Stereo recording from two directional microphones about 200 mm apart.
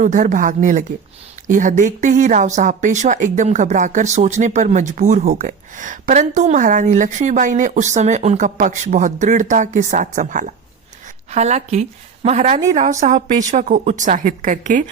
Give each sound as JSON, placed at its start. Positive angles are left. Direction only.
{"t": 0.0, "sound": "speech", "side_deg": -40}